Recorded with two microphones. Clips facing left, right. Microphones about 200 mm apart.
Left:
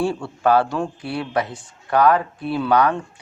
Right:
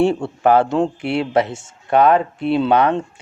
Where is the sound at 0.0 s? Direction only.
25° right (ahead or behind).